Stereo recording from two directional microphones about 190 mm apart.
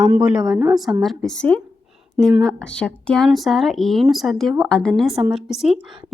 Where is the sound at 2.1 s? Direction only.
5° right (ahead or behind).